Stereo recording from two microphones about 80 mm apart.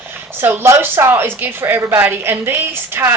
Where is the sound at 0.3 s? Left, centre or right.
Right.